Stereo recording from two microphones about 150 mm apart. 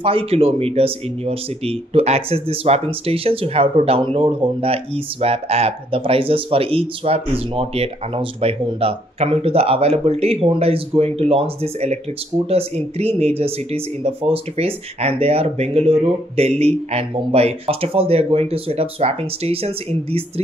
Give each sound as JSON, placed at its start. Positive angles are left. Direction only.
{"t": 0.0, "sound": "speech", "side_deg": -40}